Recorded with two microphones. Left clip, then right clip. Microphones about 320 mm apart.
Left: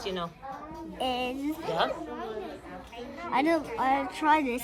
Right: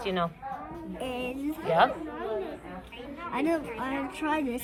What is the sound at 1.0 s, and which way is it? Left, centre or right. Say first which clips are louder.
Speech: left 3 dB; left.